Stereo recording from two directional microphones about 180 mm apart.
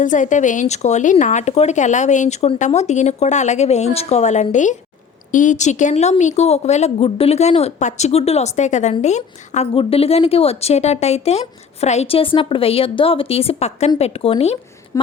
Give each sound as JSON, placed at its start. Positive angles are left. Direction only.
{"t": 0.0, "sound": "a woman's voice", "side_deg": 45}